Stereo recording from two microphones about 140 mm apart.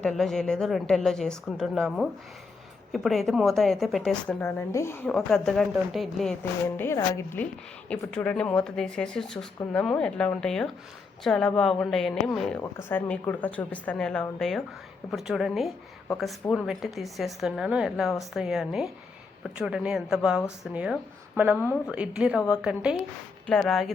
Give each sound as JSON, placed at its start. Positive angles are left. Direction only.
{"t": 0.0, "sound": "a woman's voice", "side_deg": 5}
{"t": 5.0, "sound": "speech", "side_deg": 5}
{"t": 6.7, "sound": "a woman's voice", "side_deg": 20}
{"t": 7.9, "sound": "a woman's voice", "side_deg": 10}
{"t": 23.5, "sound": "speech", "side_deg": 5}